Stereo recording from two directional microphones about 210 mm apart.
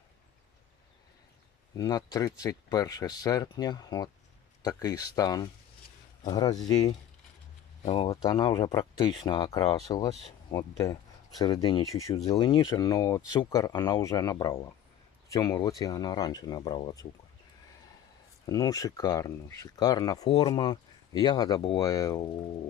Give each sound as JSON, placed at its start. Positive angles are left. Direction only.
{"t": 1.7, "sound": "speech", "side_deg": 15}
{"t": 7.8, "sound": "speech", "side_deg": 25}
{"t": 18.4, "sound": "speech", "side_deg": 20}